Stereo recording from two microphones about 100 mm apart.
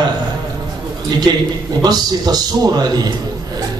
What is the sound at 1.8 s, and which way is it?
A man's voice, 40° right (ahead or behind).